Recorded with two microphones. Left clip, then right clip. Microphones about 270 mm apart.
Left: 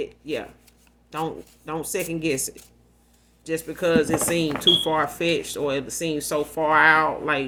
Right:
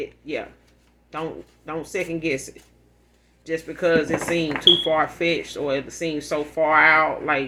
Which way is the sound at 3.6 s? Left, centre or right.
Left.